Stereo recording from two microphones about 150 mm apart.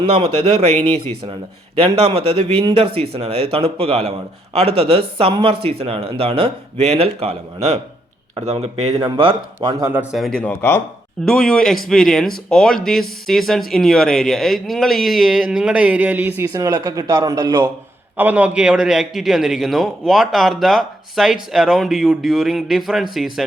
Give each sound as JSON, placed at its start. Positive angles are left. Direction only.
{"t": 1.3, "sound": "speech", "side_deg": -40}
{"t": 9.0, "sound": "speech", "side_deg": -30}
{"t": 10.0, "sound": "a man's voice", "side_deg": -5}
{"t": 16.4, "sound": "speech", "side_deg": -20}
{"t": 18.2, "sound": "a man's voice", "side_deg": -10}